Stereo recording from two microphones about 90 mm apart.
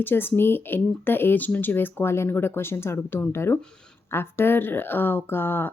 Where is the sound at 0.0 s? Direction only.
25° left (ahead or behind).